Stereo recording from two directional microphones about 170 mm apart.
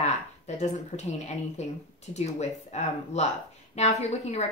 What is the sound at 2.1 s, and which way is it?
A woman's voice, 40° left (ahead or behind).